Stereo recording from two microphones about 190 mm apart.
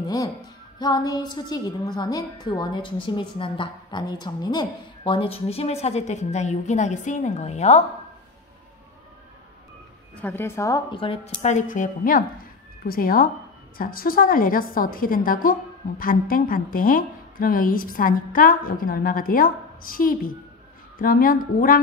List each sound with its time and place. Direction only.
0.0 s music: 20° left (ahead or behind)
0.7 s a woman's voice: 20° left (ahead or behind)
10.2 s a woman's voice: 10° left (ahead or behind); by 21.7 s 45° left (ahead or behind)